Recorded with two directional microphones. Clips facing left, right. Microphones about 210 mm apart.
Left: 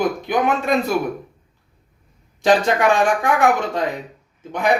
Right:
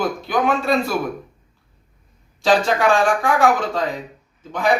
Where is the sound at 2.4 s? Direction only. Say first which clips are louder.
Left 1 dB; 20° left (ahead or behind).